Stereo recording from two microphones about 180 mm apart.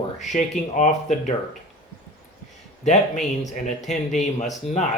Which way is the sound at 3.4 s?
40° left (ahead or behind).